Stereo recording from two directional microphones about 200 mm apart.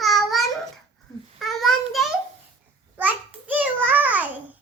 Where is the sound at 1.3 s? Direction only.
Centre (ahead or behind).